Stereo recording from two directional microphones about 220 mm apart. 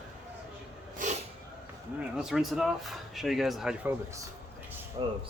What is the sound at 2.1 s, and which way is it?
Speech, centre (ahead or behind).